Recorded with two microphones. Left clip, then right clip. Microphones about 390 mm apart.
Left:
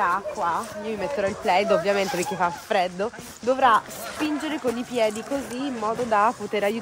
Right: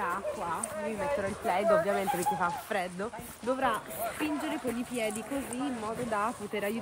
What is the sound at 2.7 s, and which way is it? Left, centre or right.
Speech, centre.